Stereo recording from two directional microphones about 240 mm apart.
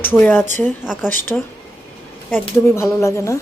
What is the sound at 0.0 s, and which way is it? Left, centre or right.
Speech, centre.